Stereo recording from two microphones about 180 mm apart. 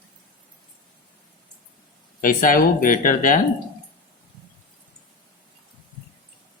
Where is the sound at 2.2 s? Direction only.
50° left (ahead or behind).